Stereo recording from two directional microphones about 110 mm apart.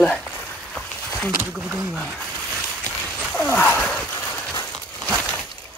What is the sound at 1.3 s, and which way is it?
Speech, 10° right (ahead or behind).